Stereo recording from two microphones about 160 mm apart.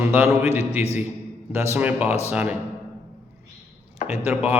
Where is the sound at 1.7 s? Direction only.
10° right (ahead or behind).